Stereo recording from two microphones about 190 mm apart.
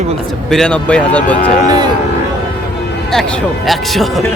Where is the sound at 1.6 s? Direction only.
20° right (ahead or behind).